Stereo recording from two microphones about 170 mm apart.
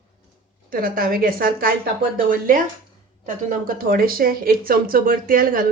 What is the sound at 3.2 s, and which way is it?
Speech, 55° right (ahead or behind).